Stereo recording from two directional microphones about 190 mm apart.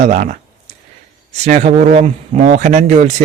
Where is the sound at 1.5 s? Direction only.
35° right (ahead or behind).